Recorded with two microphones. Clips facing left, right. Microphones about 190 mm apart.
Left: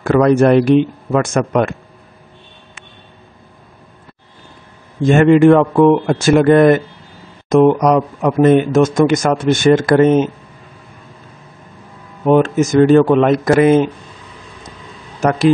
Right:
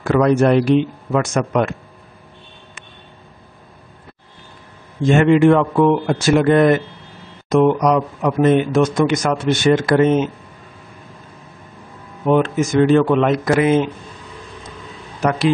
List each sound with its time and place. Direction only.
0.0 s speech: 50° left (ahead or behind)
5.0 s speech: 45° left (ahead or behind)
12.3 s speech: 45° left (ahead or behind)
15.1 s speech: 45° left (ahead or behind)